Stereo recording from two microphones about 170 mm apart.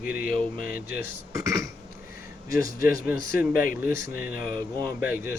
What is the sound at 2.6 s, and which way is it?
Speech, 60° left (ahead or behind).